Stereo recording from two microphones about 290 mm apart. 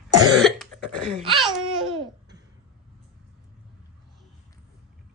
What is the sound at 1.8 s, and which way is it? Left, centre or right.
Babbling, centre.